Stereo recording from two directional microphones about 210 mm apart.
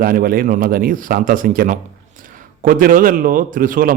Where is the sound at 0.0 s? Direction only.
40° right (ahead or behind).